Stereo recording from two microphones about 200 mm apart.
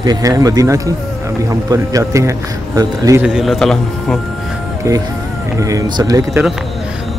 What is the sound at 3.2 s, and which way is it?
Speech, 5° right (ahead or behind).